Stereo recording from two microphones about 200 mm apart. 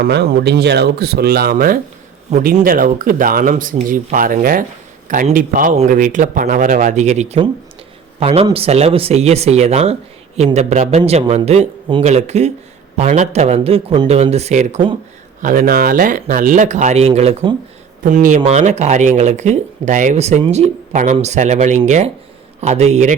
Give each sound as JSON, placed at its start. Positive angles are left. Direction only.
{"t": 0.0, "sound": "speech", "side_deg": -50}
{"t": 15.4, "sound": "speech", "side_deg": -45}